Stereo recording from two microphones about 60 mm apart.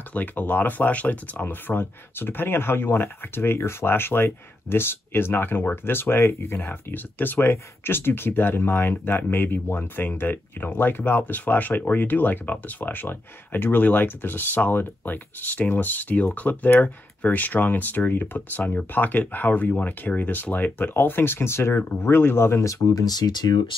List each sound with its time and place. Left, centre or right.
0.1 s speech: left
22.7 s speech: left